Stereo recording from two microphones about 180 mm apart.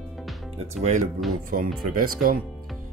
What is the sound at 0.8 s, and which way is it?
Speech, 40° right (ahead or behind).